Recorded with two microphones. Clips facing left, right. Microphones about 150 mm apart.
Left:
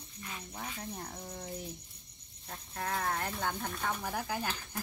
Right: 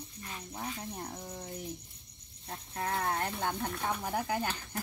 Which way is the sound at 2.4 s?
30° right (ahead or behind).